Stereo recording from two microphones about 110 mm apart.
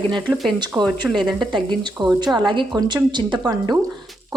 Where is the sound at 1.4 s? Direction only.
45° right (ahead or behind).